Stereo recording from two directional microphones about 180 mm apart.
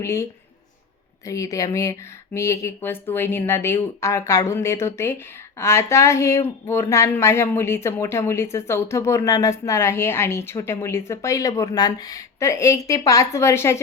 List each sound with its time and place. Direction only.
0.0 s a woman's voice: 15° left (ahead or behind)